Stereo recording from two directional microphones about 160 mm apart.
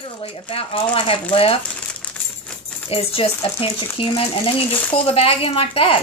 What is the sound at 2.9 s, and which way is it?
Speech, 35° left (ahead or behind).